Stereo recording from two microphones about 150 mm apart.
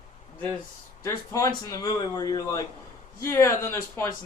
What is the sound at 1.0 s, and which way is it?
Speech, 20° left (ahead or behind).